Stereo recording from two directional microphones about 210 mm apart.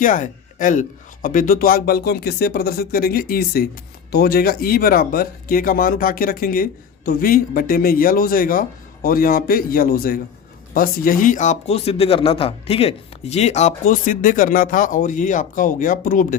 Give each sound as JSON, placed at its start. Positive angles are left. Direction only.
{"t": 0.0, "sound": "speech", "side_deg": 40}